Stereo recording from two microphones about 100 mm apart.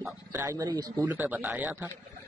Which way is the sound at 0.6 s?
40° right (ahead or behind).